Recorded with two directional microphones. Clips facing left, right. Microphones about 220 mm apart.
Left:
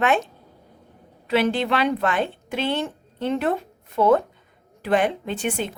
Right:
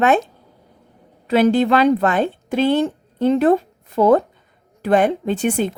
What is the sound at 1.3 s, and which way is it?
A woman's voice, 40° right (ahead or behind).